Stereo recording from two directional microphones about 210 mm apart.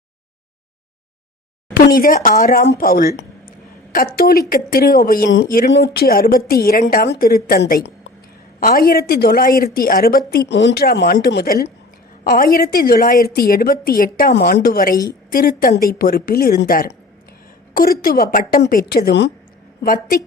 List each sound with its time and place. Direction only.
1.7 s a woman's voice: 45° left (ahead or behind)